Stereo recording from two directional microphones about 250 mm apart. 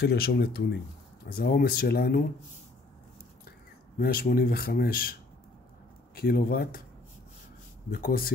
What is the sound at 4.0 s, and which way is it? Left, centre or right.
Speech, left.